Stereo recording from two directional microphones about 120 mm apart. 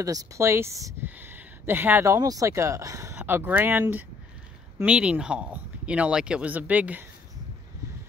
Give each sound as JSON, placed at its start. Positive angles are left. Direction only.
{"t": 0.0, "sound": "speech", "side_deg": -30}
{"t": 1.0, "sound": "a sound", "side_deg": -15}
{"t": 2.1, "sound": "speech", "side_deg": -30}
{"t": 4.8, "sound": "speech", "side_deg": -10}